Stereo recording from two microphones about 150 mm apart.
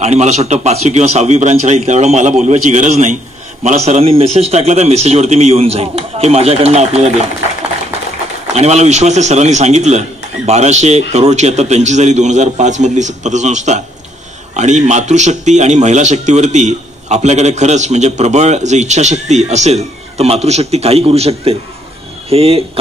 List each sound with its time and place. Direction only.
0.0 s a man's voice: 50° right (ahead or behind)
8.5 s a man's voice: 50° right (ahead or behind)